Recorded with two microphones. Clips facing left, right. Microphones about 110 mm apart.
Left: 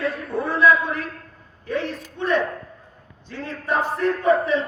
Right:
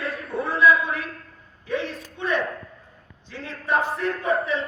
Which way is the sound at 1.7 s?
Centre (ahead or behind).